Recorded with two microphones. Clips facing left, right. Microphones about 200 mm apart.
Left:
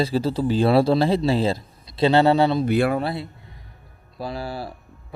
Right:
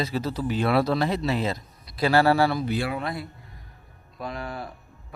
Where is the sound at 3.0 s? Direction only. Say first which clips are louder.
Left 5 dB; 30° left (ahead or behind).